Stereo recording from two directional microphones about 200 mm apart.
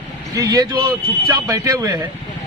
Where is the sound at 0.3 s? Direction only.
20° right (ahead or behind).